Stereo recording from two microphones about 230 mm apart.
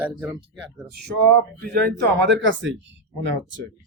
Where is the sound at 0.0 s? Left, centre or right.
Centre.